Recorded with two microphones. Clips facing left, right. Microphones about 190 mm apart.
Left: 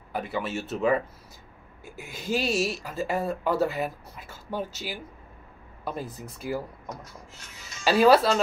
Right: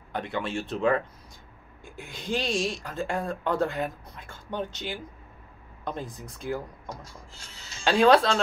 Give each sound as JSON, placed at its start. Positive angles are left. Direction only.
{"t": 0.1, "sound": "speech", "side_deg": 5}
{"t": 7.1, "sound": "a sound", "side_deg": -30}
{"t": 7.8, "sound": "speech", "side_deg": 5}